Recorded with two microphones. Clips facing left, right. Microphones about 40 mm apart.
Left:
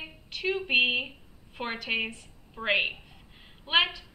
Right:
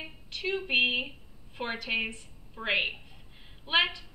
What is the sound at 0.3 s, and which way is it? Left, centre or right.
A woman's voice, centre.